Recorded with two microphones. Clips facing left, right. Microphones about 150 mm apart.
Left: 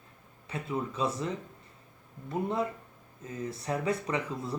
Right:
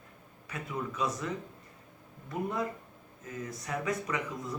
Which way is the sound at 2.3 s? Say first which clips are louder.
Left 3 dB; 25° left (ahead or behind).